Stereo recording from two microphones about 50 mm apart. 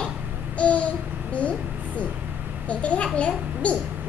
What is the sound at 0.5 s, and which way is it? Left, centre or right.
Babbling, left.